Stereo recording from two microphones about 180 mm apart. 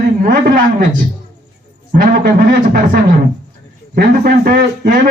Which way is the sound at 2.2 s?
55° right (ahead or behind).